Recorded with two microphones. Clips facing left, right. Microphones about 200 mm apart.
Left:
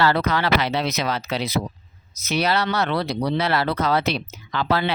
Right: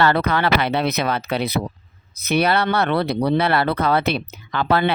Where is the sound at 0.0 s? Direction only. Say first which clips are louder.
Right 2 dB; 60° right (ahead or behind).